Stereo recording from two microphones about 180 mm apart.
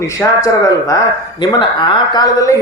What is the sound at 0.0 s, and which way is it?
A man's voice, 15° left (ahead or behind).